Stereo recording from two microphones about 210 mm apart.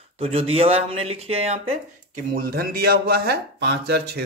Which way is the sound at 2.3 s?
45° right (ahead or behind).